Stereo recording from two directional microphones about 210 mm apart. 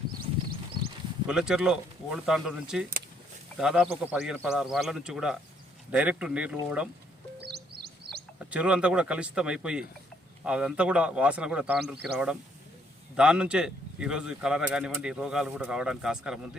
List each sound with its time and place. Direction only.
0.2 s horse: 45° right (ahead or behind)
1.3 s speech: 5° right (ahead or behind)
7.4 s music: 50° right (ahead or behind)
8.4 s speech: 5° right (ahead or behind)